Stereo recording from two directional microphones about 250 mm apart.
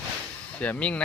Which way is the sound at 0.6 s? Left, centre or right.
Centre.